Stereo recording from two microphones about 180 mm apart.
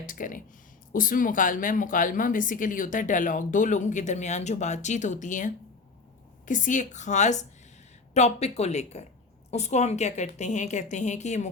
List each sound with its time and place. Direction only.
0.0 s a woman's voice: 50° left (ahead or behind)